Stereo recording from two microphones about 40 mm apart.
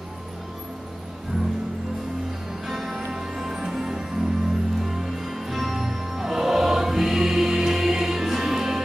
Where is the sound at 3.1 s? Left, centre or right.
Centre.